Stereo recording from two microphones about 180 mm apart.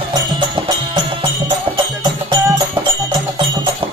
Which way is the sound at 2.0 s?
25° right (ahead or behind).